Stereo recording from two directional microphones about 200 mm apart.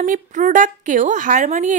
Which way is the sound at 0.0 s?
40° right (ahead or behind).